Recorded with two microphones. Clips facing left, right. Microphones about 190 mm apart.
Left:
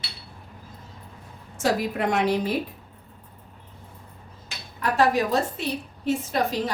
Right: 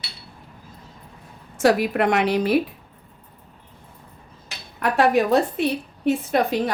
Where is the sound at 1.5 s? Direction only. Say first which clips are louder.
Right 6 dB; 65° right (ahead or behind).